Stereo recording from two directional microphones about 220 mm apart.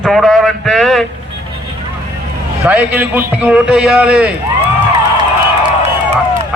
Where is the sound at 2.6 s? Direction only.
5° right (ahead or behind).